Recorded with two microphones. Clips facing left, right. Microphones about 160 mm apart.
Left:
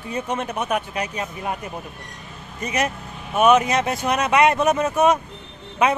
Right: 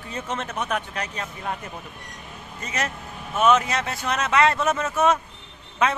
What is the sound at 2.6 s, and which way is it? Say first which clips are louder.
A man's voice: left 6 dB; 15° left (ahead or behind).